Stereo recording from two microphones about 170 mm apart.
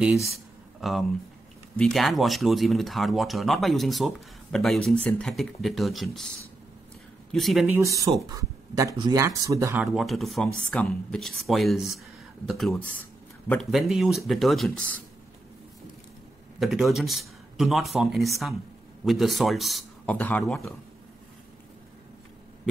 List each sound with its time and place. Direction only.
0.0 s speech: centre (ahead or behind)
7.3 s speech: centre (ahead or behind)
7.8 s speech: 20° right (ahead or behind)
9.9 s speech: centre (ahead or behind)
16.5 s speech: centre (ahead or behind)